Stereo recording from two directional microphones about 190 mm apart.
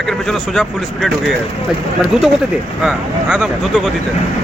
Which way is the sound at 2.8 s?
5° right (ahead or behind).